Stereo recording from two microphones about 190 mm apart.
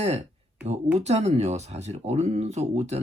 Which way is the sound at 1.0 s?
35° right (ahead or behind).